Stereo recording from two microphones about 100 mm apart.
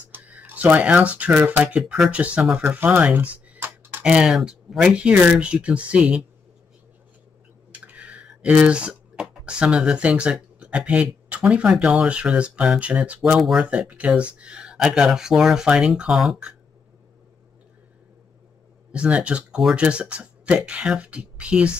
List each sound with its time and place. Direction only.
0.1 s speech: 15° right (ahead or behind)
3.5 s tick: 25° right (ahead or behind)
4.0 s speech: 10° right (ahead or behind)
7.7 s speech: 15° right (ahead or behind)
18.9 s speech: 10° right (ahead or behind)